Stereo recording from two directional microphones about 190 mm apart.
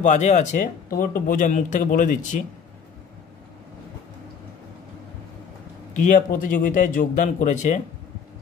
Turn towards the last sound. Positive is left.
turn(degrees=40)  # may be behind; listen again after turning